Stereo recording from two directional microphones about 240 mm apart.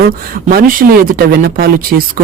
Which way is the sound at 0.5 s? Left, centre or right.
Right.